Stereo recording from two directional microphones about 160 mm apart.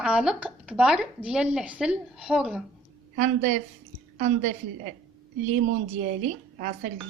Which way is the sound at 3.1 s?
50° right (ahead or behind).